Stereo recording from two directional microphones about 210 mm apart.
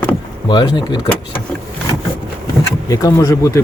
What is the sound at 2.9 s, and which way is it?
Speech, 15° left (ahead or behind).